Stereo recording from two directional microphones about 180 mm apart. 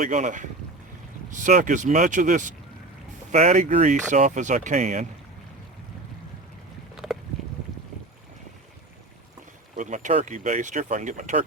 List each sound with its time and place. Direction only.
0.0 s speech: 40° right (ahead or behind)
6.9 s boat: 5° right (ahead or behind)
9.7 s speech: 45° right (ahead or behind)